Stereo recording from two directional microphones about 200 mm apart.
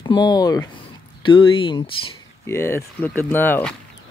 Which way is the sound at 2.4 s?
10° left (ahead or behind).